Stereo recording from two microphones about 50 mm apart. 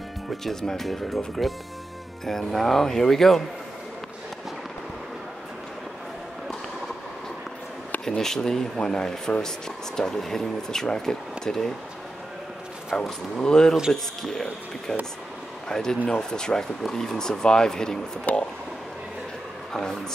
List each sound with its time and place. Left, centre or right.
0.4 s speech: centre
8.2 s speech: centre
12.9 s speech: centre
18.3 s speech: left
19.7 s speech: centre